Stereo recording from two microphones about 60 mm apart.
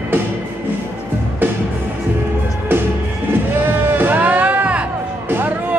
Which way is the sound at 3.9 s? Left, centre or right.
Right.